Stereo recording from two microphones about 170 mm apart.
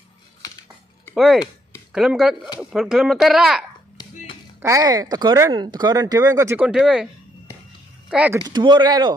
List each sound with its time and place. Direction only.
1.1 s speech: centre (ahead or behind)
4.0 s a sound: 25° left (ahead or behind)
4.6 s speech: 20° right (ahead or behind)
8.1 s speech: 10° right (ahead or behind)
8.4 s speech: 25° right (ahead or behind)